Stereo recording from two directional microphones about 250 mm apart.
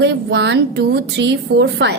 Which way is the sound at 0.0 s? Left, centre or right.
Right.